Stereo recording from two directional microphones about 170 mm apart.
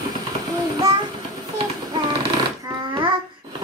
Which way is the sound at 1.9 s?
25° right (ahead or behind).